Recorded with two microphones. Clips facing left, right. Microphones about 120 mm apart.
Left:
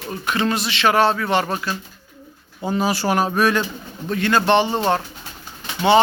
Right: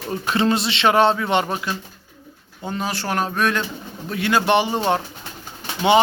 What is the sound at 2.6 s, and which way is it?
Speech, 5° left (ahead or behind).